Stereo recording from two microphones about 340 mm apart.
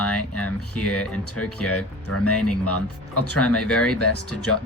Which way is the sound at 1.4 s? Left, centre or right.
Left.